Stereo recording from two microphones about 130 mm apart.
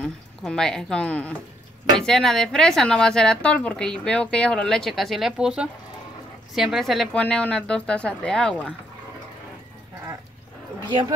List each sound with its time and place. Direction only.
0.0 s speech: 5° left (ahead or behind)
10.8 s speech: 35° right (ahead or behind)